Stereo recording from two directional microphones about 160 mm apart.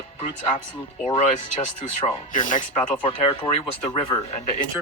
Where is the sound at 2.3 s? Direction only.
55° left (ahead or behind).